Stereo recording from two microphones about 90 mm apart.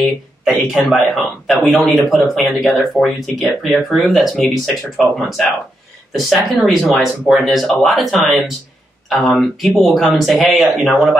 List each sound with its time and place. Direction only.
0.0 s speech: centre (ahead or behind)